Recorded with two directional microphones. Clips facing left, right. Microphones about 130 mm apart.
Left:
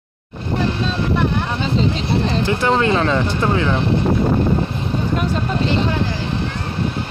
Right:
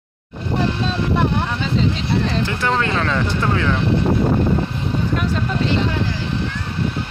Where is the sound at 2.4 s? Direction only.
20° left (ahead or behind).